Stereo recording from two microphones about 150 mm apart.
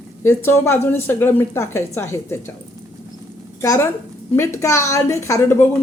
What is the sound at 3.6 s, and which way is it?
A woman's voice, 20° left (ahead or behind).